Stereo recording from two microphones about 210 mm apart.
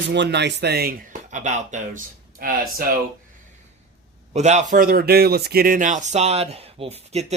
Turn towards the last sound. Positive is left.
turn(degrees=-30)  # may be behind; listen again after turning